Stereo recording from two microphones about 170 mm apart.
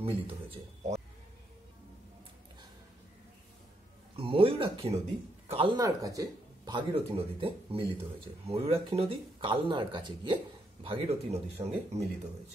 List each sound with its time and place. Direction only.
0.0 s speech: 35° right (ahead or behind)
4.2 s speech: 30° right (ahead or behind)
5.8 s speech: 20° right (ahead or behind)
6.9 s speech: 35° right (ahead or behind)